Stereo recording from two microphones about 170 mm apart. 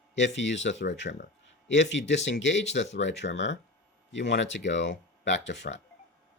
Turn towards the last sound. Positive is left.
turn(degrees=90)